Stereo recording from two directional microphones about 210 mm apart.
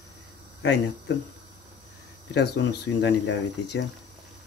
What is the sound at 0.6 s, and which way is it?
Speech, 55° left (ahead or behind).